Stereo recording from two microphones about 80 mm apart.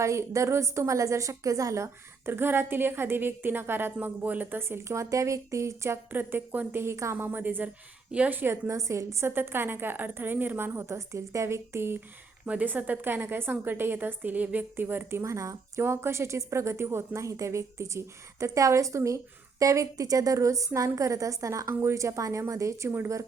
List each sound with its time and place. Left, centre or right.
0.0 s a woman's voice: right
6.1 s a woman's voice: right
7.2 s a woman's voice: right
9.3 s a woman's voice: right
12.5 s a woman's voice: centre
15.2 s a woman's voice: right